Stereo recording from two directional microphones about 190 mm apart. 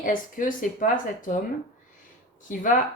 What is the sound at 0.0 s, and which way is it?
A woman's voice, 45° left (ahead or behind).